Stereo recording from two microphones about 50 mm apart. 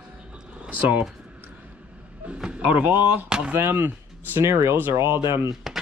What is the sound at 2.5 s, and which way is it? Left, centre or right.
Speech, right.